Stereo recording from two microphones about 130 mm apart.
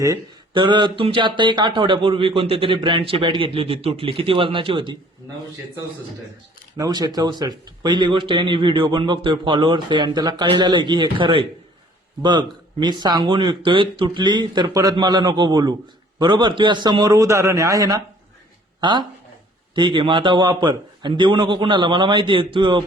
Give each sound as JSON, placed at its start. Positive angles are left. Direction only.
{"t": 0.5, "sound": "speech", "side_deg": -35}
{"t": 6.7, "sound": "speech", "side_deg": -30}